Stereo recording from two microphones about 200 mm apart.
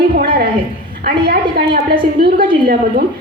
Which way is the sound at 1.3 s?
50° right (ahead or behind).